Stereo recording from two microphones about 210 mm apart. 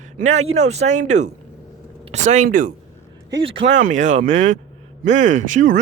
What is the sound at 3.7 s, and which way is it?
Speech, 35° right (ahead or behind).